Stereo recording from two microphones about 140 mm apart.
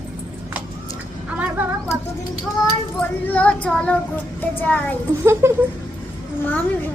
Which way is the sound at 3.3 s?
10° left (ahead or behind).